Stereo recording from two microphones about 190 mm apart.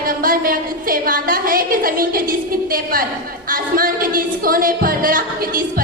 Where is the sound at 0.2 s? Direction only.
50° right (ahead or behind).